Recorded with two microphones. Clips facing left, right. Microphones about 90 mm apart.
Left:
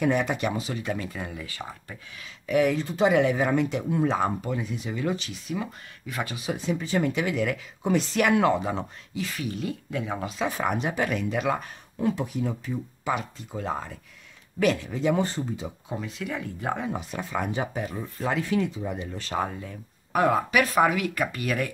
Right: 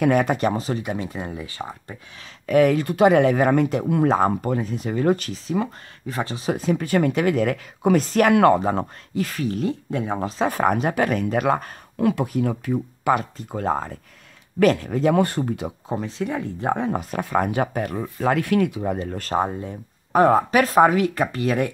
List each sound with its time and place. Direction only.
0.2 s speech: 40° right (ahead or behind)
0.8 s speech: 20° right (ahead or behind)
2.4 s speech: 55° right (ahead or behind)
5.3 s speech: 35° right (ahead or behind)
8.3 s speech: 60° right (ahead or behind)
8.5 s speech: 45° right (ahead or behind)
12.0 s speech: 75° right (ahead or behind)
12.3 s speech: 60° right (ahead or behind)
15.9 s speech: 30° right (ahead or behind)
16.7 s speech: 45° right (ahead or behind); by 18.9 s 60° right (ahead or behind)
18.9 s speech: 45° right (ahead or behind)
19.3 s speech: 30° right (ahead or behind)